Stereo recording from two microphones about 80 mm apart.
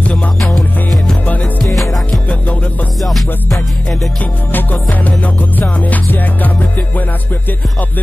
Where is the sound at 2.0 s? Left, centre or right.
Centre.